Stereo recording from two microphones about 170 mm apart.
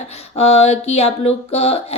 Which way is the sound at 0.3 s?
40° left (ahead or behind).